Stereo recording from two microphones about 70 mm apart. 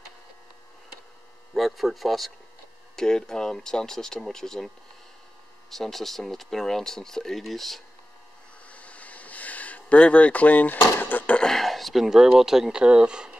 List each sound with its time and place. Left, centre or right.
1.5 s speech: centre
5.7 s speech: centre
8.6 s a sound: centre
11.4 s speech: centre